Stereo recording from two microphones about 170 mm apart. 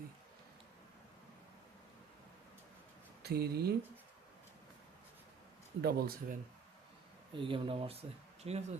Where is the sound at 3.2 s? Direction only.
70° right (ahead or behind).